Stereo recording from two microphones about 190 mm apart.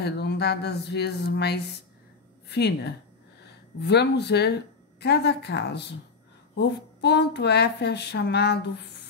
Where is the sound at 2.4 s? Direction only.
60° left (ahead or behind).